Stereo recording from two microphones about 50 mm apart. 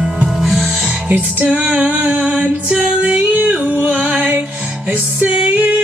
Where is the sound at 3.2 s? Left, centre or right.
Right.